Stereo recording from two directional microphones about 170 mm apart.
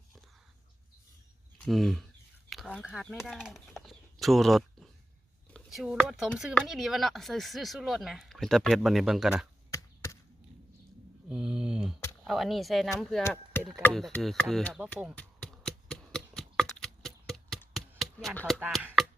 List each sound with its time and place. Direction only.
1.6 s speech: centre (ahead or behind)
2.5 s a sound: 5° left (ahead or behind)
2.8 s speech: centre (ahead or behind)
9.7 s chop: 20° left (ahead or behind)
11.3 s speech: 5° right (ahead or behind)
13.2 s chop: 15° left (ahead or behind)
13.6 s speech: 10° right (ahead or behind)
13.8 s speech: 5° left (ahead or behind)
14.8 s a sound: 5° left (ahead or behind)
18.3 s speech: centre (ahead or behind)